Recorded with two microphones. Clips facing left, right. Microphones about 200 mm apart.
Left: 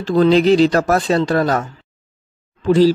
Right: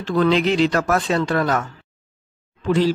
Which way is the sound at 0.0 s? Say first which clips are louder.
Left 5 dB; 35° left (ahead or behind).